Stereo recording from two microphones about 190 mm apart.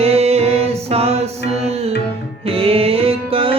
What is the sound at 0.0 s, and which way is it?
Music, 35° right (ahead or behind).